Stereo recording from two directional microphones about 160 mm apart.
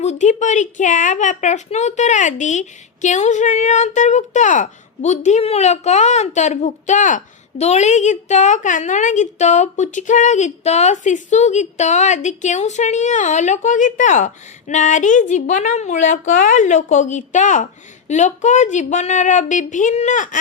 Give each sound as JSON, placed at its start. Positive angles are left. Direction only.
{"t": 0.0, "sound": "a woman's voice", "side_deg": 45}